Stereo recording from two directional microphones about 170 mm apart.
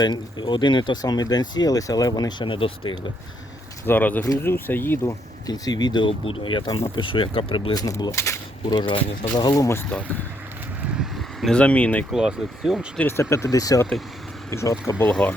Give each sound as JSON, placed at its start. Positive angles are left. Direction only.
{"t": 0.0, "sound": "speech", "side_deg": 25}
{"t": 3.8, "sound": "speech", "side_deg": 10}
{"t": 10.8, "sound": "vehicle", "side_deg": -5}
{"t": 12.1, "sound": "speech", "side_deg": -5}
{"t": 13.0, "sound": "speech", "side_deg": 15}